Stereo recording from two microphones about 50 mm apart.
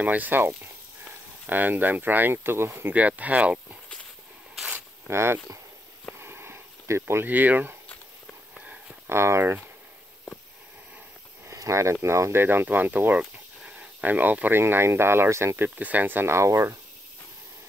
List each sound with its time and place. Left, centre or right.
0.0 s speech: right
2.9 s speech: right
5.0 s speech: right
6.1 s a sound: right
7.2 s speech: right
9.1 s speech: right
11.4 s speech: right
12.7 s speech: right
14.5 s speech: right
15.7 s speech: right
16.3 s speech: right